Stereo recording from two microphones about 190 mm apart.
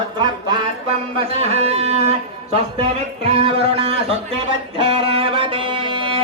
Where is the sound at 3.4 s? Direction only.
30° right (ahead or behind).